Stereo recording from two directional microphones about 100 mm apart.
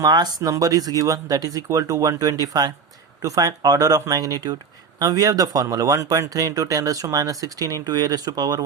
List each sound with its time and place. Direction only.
0.0 s speech: 45° right (ahead or behind)